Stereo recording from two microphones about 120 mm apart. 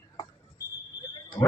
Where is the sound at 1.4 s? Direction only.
40° left (ahead or behind).